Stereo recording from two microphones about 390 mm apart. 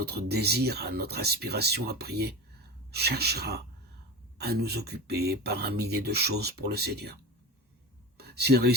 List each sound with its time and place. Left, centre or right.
0.0 s speech: right
8.2 s speech: right